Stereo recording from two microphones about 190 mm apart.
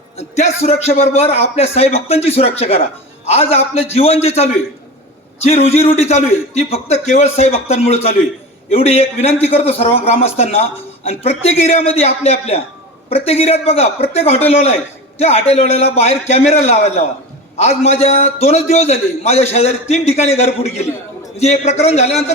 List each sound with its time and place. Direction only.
0.2 s a man's voice: 35° left (ahead or behind)